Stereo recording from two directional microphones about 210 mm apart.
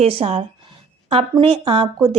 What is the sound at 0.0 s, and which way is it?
A woman's voice, 25° right (ahead or behind).